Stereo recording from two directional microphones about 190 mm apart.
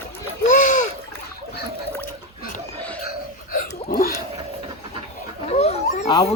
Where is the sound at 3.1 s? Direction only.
45° left (ahead or behind).